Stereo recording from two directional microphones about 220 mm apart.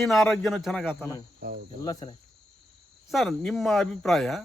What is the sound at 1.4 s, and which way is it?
Cricket, 40° right (ahead or behind).